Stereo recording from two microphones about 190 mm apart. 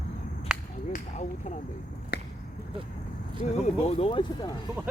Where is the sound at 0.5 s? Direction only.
5° right (ahead or behind).